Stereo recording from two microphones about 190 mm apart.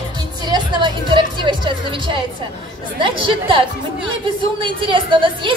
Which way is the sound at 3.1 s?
25° right (ahead or behind).